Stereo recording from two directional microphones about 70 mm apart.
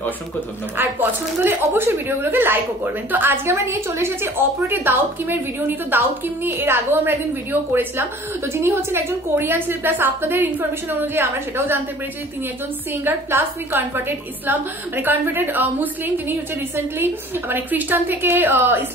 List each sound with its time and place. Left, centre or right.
0.7 s a woman's voice: right
13.0 s a woman's voice: right